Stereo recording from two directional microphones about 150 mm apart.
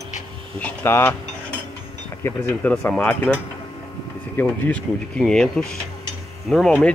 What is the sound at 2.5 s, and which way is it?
Speech, 10° left (ahead or behind).